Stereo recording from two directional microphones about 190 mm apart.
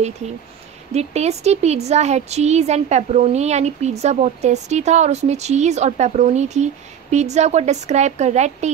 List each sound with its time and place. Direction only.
0.9 s a woman's voice: 35° right (ahead or behind)